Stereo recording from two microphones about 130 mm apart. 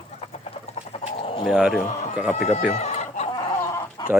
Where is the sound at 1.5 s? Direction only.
5° right (ahead or behind).